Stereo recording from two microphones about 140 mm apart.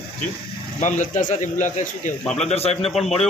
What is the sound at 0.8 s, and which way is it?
A man's voice, 65° left (ahead or behind).